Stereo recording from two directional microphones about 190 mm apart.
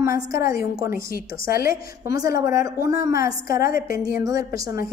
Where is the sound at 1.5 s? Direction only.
50° left (ahead or behind).